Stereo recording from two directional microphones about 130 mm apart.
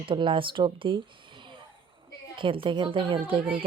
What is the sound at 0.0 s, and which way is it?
Speech, 40° right (ahead or behind).